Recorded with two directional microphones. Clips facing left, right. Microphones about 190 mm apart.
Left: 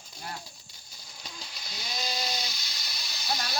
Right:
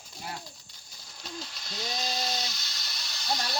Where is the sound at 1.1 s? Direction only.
5° left (ahead or behind).